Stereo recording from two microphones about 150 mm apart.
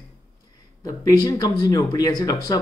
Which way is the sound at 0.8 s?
25° left (ahead or behind).